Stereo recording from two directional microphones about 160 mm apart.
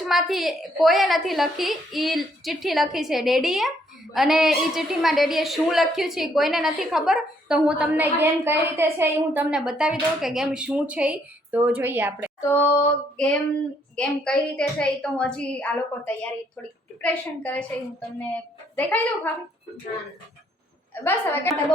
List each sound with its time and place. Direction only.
0.0 s a woman's voice: centre (ahead or behind)
12.4 s a woman's voice: 15° left (ahead or behind)
13.9 s a woman's voice: 5° left (ahead or behind)
21.0 s a woman's voice: 15° left (ahead or behind)